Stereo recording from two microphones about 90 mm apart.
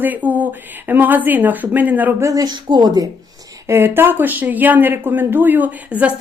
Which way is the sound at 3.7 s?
25° right (ahead or behind).